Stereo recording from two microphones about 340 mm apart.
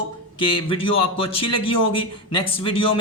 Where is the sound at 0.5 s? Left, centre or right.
Centre.